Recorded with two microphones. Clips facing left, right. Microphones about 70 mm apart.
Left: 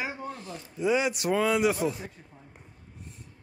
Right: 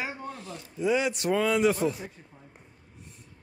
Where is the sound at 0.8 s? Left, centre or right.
Centre.